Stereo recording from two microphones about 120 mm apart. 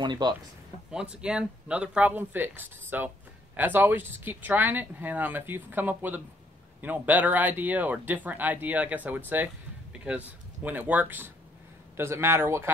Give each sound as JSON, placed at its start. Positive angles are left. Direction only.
{"t": 0.0, "sound": "speech", "side_deg": -40}
{"t": 0.9, "sound": "speech", "side_deg": -5}